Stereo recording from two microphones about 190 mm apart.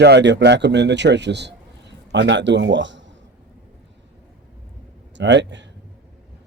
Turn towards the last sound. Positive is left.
turn(degrees=-70)  # may be behind; listen again after turning